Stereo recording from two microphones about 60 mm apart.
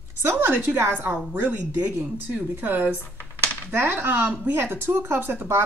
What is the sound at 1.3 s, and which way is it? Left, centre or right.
Speech, right.